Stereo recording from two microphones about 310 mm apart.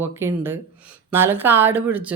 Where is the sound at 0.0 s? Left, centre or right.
Centre.